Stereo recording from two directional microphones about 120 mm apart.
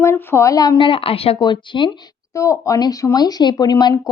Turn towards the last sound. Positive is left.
turn(degrees=35)  # may be behind; listen again after turning